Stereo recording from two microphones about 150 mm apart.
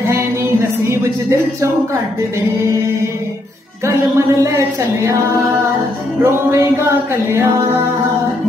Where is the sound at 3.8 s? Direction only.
20° right (ahead or behind).